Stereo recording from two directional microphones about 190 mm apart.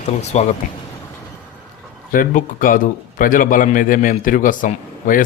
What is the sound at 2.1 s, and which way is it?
A man's voice, 45° left (ahead or behind).